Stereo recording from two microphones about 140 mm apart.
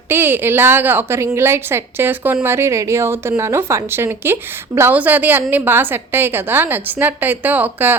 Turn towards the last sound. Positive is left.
turn(degrees=-15)  # may be behind; listen again after turning